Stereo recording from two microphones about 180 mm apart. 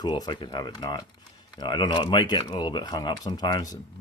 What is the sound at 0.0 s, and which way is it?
Speech, 25° left (ahead or behind).